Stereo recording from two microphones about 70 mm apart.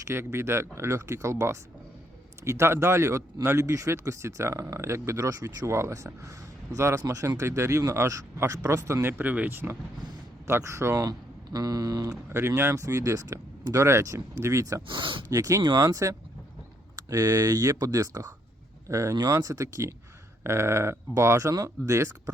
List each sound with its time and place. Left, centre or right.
0.1 s speech: right
7.0 s speech: right
7.3 s speech: right
9.1 s speech: right
11.5 s speech: right
12.3 s speech: right
12.7 s speech: right
15.6 s speech: right
20.4 s speech: right
21.8 s speech: right